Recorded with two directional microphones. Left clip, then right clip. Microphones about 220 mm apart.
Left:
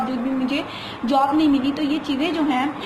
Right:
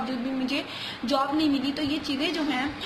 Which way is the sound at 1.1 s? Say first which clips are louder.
Left 7 dB; 30° right (ahead or behind).